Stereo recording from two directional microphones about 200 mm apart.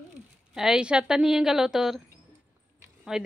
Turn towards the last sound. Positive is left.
turn(degrees=-5)  # may be behind; listen again after turning